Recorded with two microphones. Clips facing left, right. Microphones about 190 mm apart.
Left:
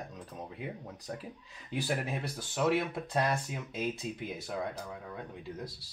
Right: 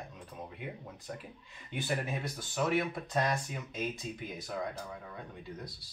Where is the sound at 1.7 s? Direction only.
35° left (ahead or behind).